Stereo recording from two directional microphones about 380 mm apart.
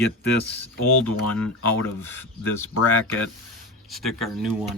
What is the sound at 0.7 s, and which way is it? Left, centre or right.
Speech, left.